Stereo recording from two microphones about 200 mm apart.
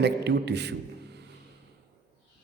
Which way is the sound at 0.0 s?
55° right (ahead or behind).